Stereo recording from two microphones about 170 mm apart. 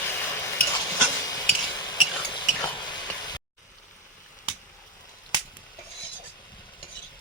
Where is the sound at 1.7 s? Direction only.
25° left (ahead or behind).